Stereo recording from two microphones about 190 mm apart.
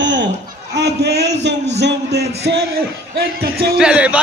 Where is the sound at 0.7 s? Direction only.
60° right (ahead or behind).